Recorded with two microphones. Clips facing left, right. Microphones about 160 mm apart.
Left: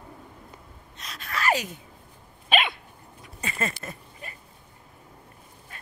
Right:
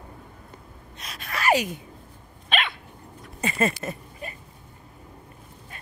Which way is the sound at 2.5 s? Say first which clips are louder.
Left 3 dB; 5° left (ahead or behind).